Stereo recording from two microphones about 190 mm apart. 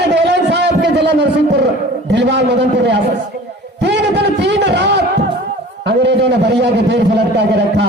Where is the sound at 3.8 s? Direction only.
65° right (ahead or behind).